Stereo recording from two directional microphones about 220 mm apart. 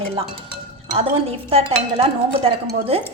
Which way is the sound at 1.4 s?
25° right (ahead or behind).